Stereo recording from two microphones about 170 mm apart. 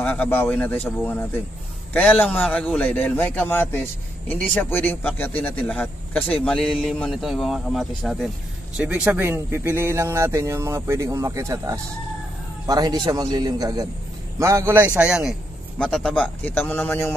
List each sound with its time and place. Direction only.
0.0 s speech: 10° left (ahead or behind)
2.2 s a man's voice: 5° left (ahead or behind); by 14.9 s 15° right (ahead or behind)
15.0 s a man's voice: 5° right (ahead or behind); by 17.1 s 10° left (ahead or behind)